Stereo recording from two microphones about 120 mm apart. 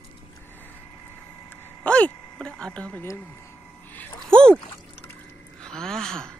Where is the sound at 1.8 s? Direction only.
10° left (ahead or behind).